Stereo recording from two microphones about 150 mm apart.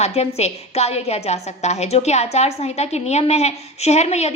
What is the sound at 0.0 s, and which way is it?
A woman's voice, 45° left (ahead or behind).